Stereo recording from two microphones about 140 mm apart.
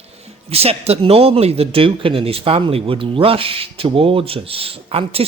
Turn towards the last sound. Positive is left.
turn(degrees=-45)  # may be behind; listen again after turning